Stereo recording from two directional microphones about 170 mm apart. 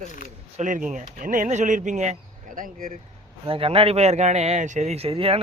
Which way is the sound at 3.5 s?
35° right (ahead or behind).